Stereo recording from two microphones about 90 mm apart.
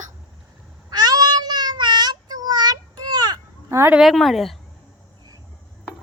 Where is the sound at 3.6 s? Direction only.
30° right (ahead or behind).